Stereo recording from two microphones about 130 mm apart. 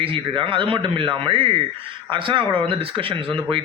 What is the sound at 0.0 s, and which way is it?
Speech, 45° right (ahead or behind).